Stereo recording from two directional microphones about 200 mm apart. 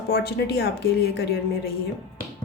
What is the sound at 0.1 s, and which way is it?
Speech, 55° left (ahead or behind).